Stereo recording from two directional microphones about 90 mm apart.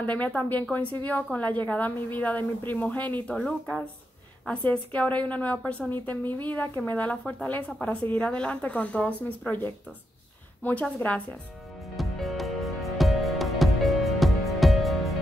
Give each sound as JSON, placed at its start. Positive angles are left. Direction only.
{"t": 0.0, "sound": "a woman's voice", "side_deg": 20}
{"t": 10.6, "sound": "a woman's voice", "side_deg": 20}
{"t": 12.0, "sound": "music", "side_deg": 0}